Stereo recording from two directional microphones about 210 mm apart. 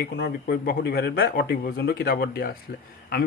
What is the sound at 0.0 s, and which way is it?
Speech, 50° left (ahead or behind).